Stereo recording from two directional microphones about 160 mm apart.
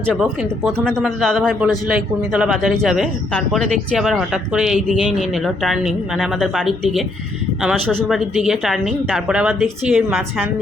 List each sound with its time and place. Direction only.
0.1 s a man's voice: centre (ahead or behind)